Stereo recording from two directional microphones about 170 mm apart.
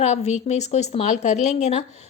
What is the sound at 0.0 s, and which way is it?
Speech, 40° left (ahead or behind).